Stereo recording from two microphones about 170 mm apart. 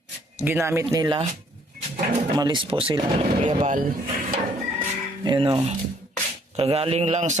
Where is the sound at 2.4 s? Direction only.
25° right (ahead or behind).